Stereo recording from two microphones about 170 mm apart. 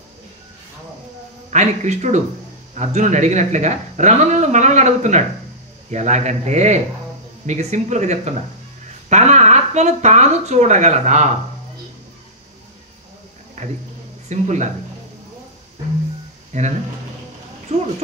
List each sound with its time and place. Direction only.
1.5 s speech: 45° right (ahead or behind)
14.3 s speech: 45° right (ahead or behind)
16.5 s speech: 45° right (ahead or behind)
17.7 s speech: 40° right (ahead or behind)